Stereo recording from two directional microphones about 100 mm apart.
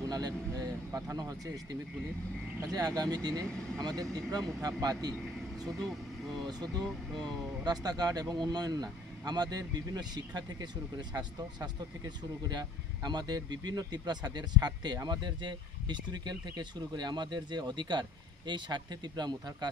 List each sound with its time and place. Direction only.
0.1 s a sound: 40° right (ahead or behind)
2.6 s speech: 40° right (ahead or behind)
5.7 s speech: centre (ahead or behind)
6.4 s speech: 45° right (ahead or behind)
6.8 s speech: 5° left (ahead or behind)
7.6 s speech: 40° right (ahead or behind)